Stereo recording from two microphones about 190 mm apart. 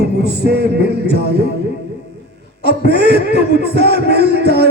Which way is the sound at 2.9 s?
60° right (ahead or behind).